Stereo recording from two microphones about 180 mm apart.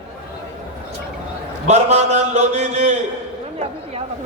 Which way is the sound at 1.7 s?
40° right (ahead or behind).